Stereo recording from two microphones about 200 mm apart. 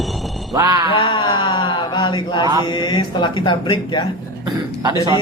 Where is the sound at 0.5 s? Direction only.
15° right (ahead or behind).